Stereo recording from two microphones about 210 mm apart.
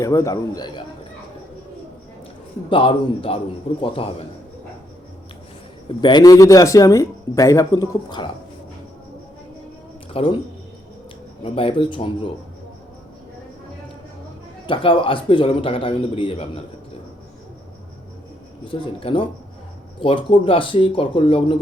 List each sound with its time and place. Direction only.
0.0 s speech: 15° left (ahead or behind)
2.6 s a man's voice: 25° left (ahead or behind)
6.0 s speech: 20° left (ahead or behind)
10.1 s speech: 25° left (ahead or behind)
11.5 s a man's voice: 25° left (ahead or behind)
14.7 s a man's voice: 25° left (ahead or behind)
18.6 s a man's voice: 25° left (ahead or behind)